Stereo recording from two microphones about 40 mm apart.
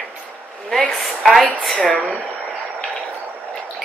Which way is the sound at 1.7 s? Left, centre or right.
Left.